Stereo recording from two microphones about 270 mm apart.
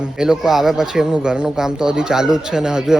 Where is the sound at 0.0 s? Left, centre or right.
Centre.